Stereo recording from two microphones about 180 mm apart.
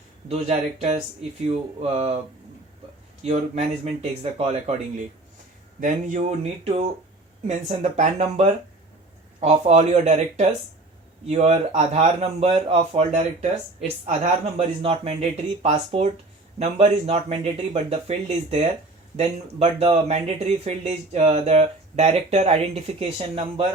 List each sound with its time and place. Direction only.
0.3 s speech: 35° right (ahead or behind)
3.2 s speech: 35° right (ahead or behind)
7.4 s speech: 40° right (ahead or behind)